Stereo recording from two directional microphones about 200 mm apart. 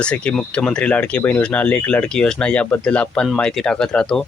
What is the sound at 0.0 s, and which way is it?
Speech, 5° left (ahead or behind).